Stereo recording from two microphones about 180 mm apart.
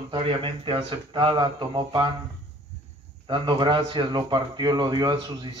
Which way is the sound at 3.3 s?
25° right (ahead or behind).